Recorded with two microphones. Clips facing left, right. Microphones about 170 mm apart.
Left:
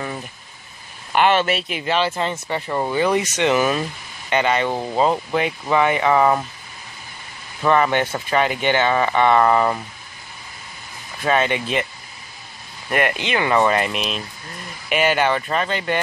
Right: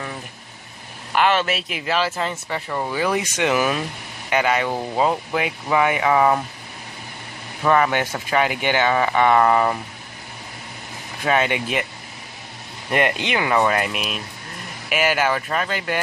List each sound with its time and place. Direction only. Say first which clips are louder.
1.1 s speech: left 2 dB; centre (ahead or behind)
7.6 s speech: left 1 dB; 5° right (ahead or behind)
11.2 s speech: left 1 dB; 15° right (ahead or behind)
12.9 s speech: even; 20° right (ahead or behind)